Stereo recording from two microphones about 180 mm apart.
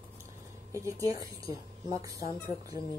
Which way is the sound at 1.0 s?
20° right (ahead or behind).